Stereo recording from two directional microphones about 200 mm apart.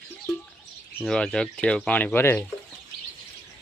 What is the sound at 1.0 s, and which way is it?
Speech, 5° left (ahead or behind).